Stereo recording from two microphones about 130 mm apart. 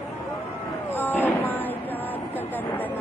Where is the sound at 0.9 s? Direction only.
15° left (ahead or behind).